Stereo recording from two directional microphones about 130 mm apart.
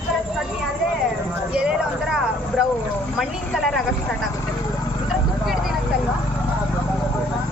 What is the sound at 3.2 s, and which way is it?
Speech, centre (ahead or behind).